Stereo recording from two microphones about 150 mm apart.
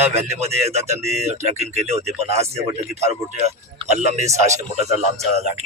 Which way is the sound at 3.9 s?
50° right (ahead or behind).